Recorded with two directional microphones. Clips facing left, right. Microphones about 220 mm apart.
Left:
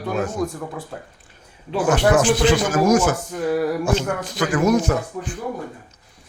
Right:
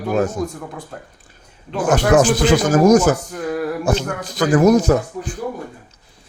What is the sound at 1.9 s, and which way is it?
Speech, 40° right (ahead or behind).